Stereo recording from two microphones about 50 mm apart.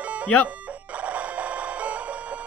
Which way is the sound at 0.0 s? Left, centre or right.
Right.